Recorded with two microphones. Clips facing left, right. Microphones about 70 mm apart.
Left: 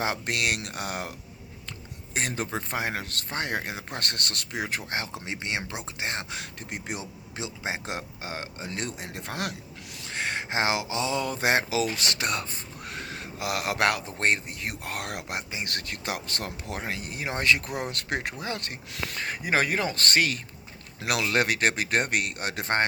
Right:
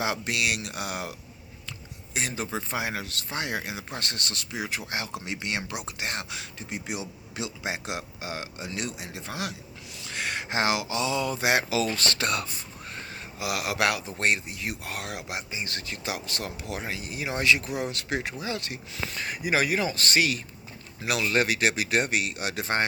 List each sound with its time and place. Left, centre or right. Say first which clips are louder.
0.0 s speech: even; left
2.1 s speech: left 1 dB; left
4.9 s speech: even; left
6.3 s a man's voice: even; left
9.2 s speech: left 1 dB; left
10.0 s a sound: left 1 dB; left
11.2 s speech: left 1 dB; left
12.8 s a sound: left 3 dB; left
13.4 s speech: left 1 dB; left